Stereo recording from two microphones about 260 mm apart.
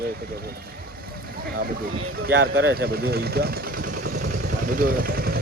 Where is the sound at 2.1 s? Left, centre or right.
Right.